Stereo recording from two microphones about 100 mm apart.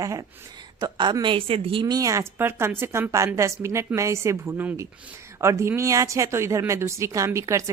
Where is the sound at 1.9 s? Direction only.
35° right (ahead or behind).